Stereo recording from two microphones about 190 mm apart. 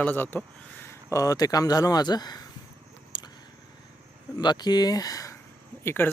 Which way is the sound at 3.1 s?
25° left (ahead or behind).